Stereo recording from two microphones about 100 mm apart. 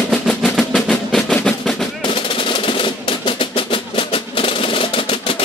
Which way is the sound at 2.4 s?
60° left (ahead or behind).